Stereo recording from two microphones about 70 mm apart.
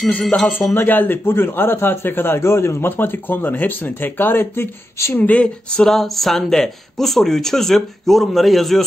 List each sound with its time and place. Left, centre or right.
0.0 s speech: centre
0.7 s a man's voice: left
5.1 s speech: left
5.9 s speech: centre